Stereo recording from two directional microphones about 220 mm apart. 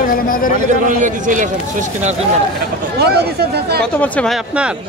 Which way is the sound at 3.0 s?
45° right (ahead or behind).